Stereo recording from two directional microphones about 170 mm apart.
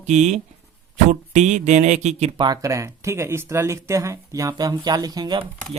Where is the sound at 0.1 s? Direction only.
45° right (ahead or behind).